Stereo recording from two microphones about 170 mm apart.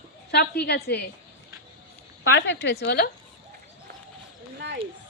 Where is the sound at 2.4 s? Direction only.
90° left.